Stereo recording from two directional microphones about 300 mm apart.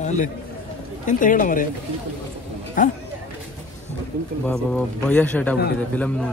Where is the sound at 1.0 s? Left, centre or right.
Left.